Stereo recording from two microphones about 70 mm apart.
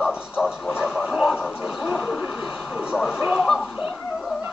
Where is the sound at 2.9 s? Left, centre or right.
Centre.